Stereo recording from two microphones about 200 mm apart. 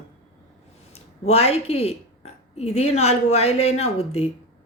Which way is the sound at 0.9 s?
30° left (ahead or behind).